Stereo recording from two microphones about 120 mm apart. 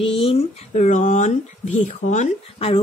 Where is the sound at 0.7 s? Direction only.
90° left.